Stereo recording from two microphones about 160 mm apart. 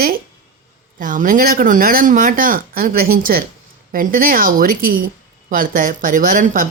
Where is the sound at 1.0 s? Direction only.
55° right (ahead or behind).